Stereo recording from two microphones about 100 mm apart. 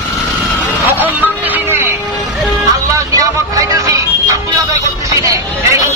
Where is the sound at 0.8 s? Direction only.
20° right (ahead or behind).